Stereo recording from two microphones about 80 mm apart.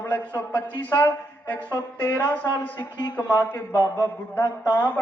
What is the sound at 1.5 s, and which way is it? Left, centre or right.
Speech, right.